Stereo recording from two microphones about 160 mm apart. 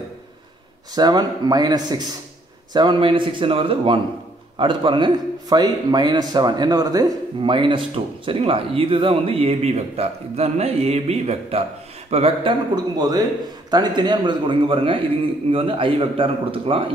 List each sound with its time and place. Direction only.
0.9 s a man's voice: 25° right (ahead or behind)
12.7 s a man's voice: 25° right (ahead or behind)